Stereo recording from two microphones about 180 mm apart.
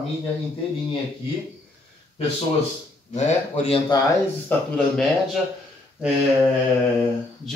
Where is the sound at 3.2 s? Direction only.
35° left (ahead or behind).